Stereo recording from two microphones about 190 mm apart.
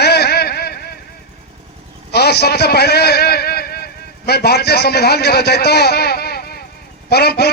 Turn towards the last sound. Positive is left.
turn(degrees=55)  # may be behind; listen again after turning